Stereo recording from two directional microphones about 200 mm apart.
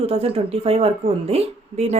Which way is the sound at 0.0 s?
30° right (ahead or behind).